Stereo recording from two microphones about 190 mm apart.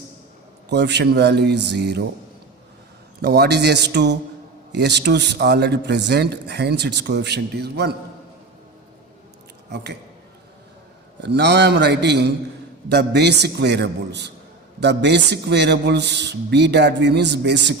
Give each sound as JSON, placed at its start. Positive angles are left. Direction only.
{"t": 0.7, "sound": "a man's voice", "side_deg": -65}
{"t": 3.2, "sound": "a man's voice", "side_deg": -55}
{"t": 9.7, "sound": "a man's voice", "side_deg": -65}
{"t": 11.2, "sound": "a man's voice", "side_deg": -65}